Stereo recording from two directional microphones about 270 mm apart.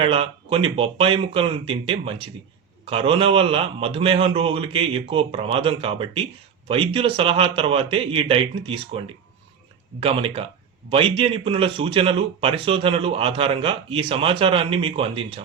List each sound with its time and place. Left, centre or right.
0.0 s a man's voice: centre